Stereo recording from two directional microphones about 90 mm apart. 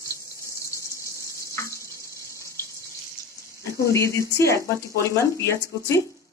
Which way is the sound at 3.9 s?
35° left (ahead or behind).